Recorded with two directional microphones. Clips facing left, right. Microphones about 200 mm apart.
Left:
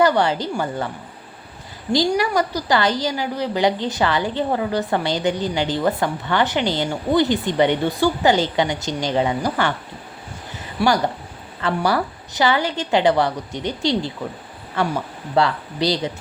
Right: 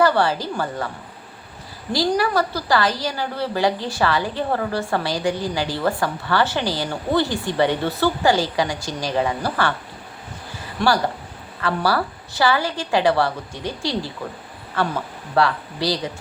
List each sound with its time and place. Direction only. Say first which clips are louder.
0.0 s a woman's voice: left 1 dB; 20° left (ahead or behind)
1.9 s a woman's voice: left 1 dB; 20° left (ahead or behind)
10.8 s speech: left 1 dB; 10° left (ahead or behind)
11.6 s a woman's voice: left 1 dB; 20° left (ahead or behind)